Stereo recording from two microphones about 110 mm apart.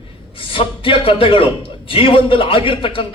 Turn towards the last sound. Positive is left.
turn(degrees=50)  # may be behind; listen again after turning